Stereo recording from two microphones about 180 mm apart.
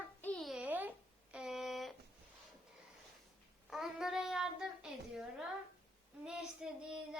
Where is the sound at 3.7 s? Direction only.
Centre (ahead or behind).